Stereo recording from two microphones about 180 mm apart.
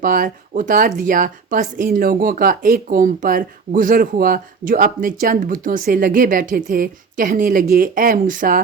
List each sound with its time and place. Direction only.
0.0 s a woman's voice: 50° right (ahead or behind)